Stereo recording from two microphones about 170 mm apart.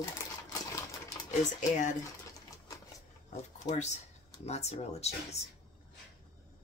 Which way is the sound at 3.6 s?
45° left (ahead or behind).